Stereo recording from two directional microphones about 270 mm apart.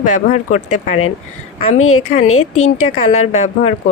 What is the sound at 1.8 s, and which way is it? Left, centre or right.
Speech, left.